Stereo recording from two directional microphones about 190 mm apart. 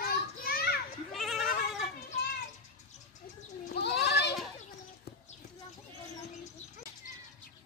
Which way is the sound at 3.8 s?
60° left (ahead or behind).